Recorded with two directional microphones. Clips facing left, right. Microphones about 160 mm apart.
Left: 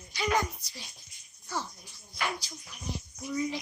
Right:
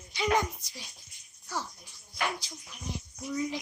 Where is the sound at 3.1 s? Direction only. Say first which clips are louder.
Left 1 dB; centre (ahead or behind).